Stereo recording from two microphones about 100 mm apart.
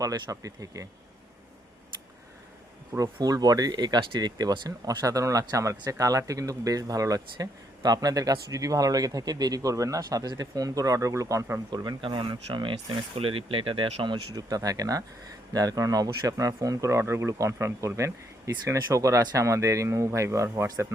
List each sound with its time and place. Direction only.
0.0 s speech: 35° right (ahead or behind)
3.0 s speech: 35° right (ahead or behind)
11.7 s speech: 45° right (ahead or behind)
13.1 s speech: 70° right (ahead or behind)
14.3 s speech: 35° right (ahead or behind)